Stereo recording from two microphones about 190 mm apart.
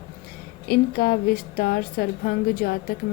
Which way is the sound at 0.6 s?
55° left (ahead or behind).